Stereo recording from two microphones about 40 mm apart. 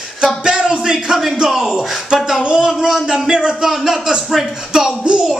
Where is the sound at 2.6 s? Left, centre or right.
Centre.